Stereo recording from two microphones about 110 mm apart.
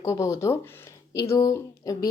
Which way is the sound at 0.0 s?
25° left (ahead or behind).